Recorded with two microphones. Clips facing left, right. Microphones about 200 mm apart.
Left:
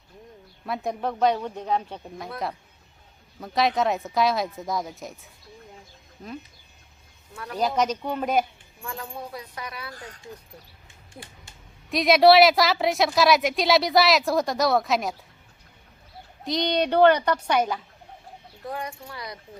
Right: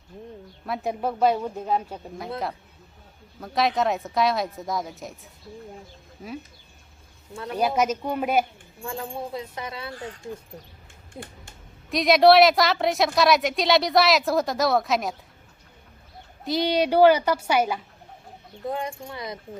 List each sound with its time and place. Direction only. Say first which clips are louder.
0.6 s speech: right 1 dB; centre (ahead or behind)
3.4 s a woman's voice: even; centre (ahead or behind)
7.8 s speech: right 1 dB; 10° right (ahead or behind)
8.8 s speech: right 4 dB; 25° right (ahead or behind)
11.1 s speech: right 5 dB; 20° right (ahead or behind)
11.9 s a woman's voice: even; centre (ahead or behind)
16.4 s speech: right 2 dB; 5° right (ahead or behind)
18.7 s speech: right 3 dB; 25° right (ahead or behind)